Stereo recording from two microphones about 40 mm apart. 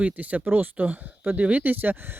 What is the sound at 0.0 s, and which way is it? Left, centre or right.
Speech, right.